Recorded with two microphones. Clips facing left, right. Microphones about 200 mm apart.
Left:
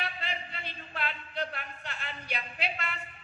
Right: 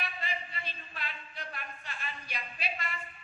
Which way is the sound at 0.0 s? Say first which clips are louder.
Left 2 dB; 70° left (ahead or behind).